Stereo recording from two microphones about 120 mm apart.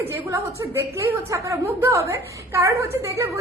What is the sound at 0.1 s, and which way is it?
A woman's voice, 25° right (ahead or behind).